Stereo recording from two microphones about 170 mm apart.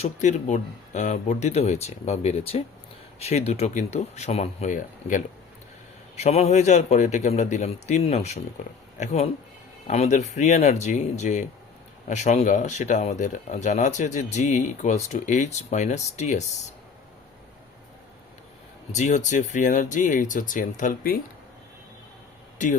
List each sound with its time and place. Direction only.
0.0 s a man's voice: 45° left (ahead or behind)
18.9 s speech: 45° left (ahead or behind)
22.5 s speech: 45° left (ahead or behind)